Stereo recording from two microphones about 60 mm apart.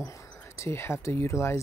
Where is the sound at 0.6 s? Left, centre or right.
Left.